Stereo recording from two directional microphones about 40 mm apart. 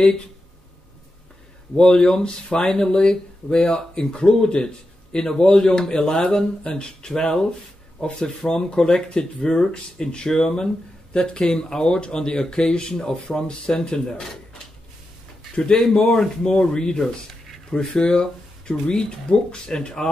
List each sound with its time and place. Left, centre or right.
1.8 s speech: left
15.5 s speech: left